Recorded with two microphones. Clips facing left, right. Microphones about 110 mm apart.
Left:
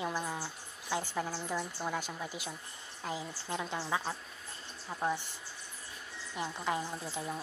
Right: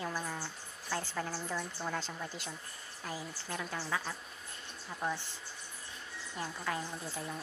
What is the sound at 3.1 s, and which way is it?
Speech, 20° left (ahead or behind).